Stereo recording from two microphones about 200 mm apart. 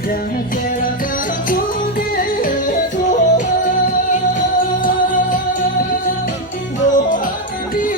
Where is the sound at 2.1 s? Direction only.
45° left (ahead or behind).